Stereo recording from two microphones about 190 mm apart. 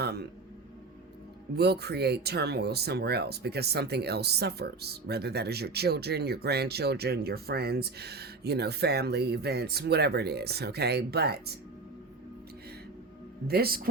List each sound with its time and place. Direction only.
0.0 s a sound: 60° right (ahead or behind)
1.5 s speech: 60° right (ahead or behind)
13.5 s speech: 55° right (ahead or behind)